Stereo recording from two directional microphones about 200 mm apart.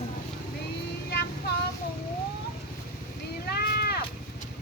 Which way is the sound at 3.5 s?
50° left (ahead or behind).